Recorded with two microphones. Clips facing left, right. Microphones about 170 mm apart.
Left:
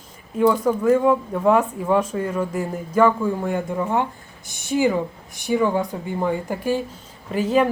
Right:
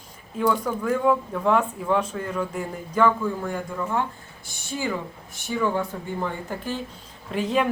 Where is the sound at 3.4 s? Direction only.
20° left (ahead or behind).